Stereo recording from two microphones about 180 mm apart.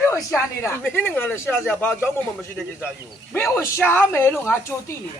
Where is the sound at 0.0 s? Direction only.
15° left (ahead or behind).